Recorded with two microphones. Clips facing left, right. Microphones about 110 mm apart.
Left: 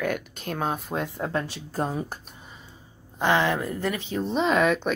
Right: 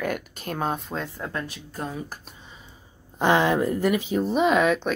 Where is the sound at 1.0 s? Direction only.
20° left (ahead or behind); by 2.2 s 35° left (ahead or behind).